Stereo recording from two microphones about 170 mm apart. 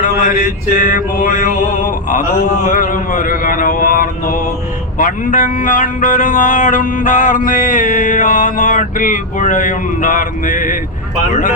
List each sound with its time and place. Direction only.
0.0 s speech: 50° left (ahead or behind)